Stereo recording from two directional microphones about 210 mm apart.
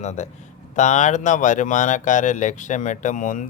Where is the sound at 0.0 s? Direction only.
35° left (ahead or behind).